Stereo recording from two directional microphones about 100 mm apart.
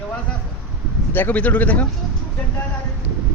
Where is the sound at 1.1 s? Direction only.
20° left (ahead or behind).